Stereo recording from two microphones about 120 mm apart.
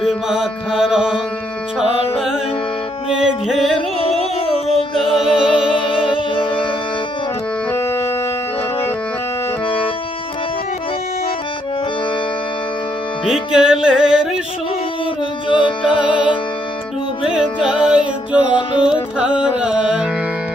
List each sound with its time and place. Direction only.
0.0 s music: centre (ahead or behind)
3.1 s music: 5° right (ahead or behind)
3.8 s music: 55° left (ahead or behind)
4.9 s music: centre (ahead or behind)
5.7 s music: 45° left (ahead or behind)
7.7 s music: 20° left (ahead or behind)
13.5 s music: 5° right (ahead or behind)
15.4 s music: 45° left (ahead or behind)
17.2 s music: 10° right (ahead or behind)